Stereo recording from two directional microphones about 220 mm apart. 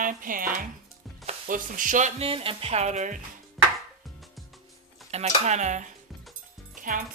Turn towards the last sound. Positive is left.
turn(degrees=-40)  # may be behind; listen again after turning